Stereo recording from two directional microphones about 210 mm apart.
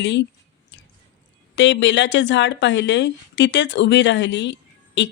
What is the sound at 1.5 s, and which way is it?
Speech, 60° left (ahead or behind).